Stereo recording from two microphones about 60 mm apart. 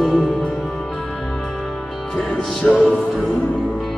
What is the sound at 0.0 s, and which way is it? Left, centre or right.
Music, centre.